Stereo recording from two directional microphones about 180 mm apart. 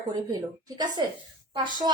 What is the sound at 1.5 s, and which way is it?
Speech, 25° right (ahead or behind).